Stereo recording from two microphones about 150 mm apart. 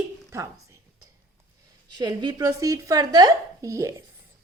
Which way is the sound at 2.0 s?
25° right (ahead or behind).